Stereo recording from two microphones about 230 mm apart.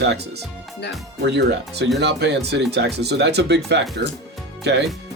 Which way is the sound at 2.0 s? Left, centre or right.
Right.